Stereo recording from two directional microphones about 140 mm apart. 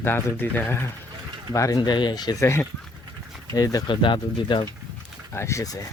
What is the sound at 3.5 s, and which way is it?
Speech, 25° left (ahead or behind).